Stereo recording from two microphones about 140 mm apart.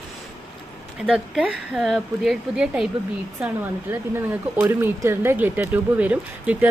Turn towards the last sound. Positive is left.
turn(degrees=-10)  # may be behind; listen again after turning